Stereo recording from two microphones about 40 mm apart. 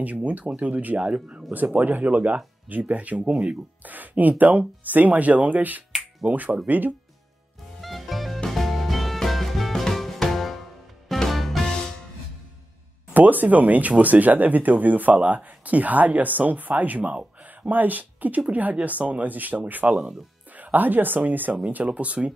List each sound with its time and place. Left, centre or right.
0.0 s speech: right
1.5 s speech: right
7.8 s music: centre
13.1 s speech: right
21.7 s speech: right